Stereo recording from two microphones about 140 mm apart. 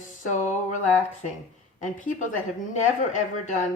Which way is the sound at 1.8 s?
65° left (ahead or behind).